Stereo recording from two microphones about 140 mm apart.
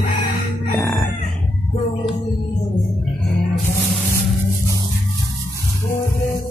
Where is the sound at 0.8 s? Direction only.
5° left (ahead or behind).